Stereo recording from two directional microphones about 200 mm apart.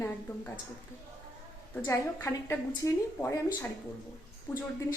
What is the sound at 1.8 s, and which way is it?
A woman's voice, 15° left (ahead or behind).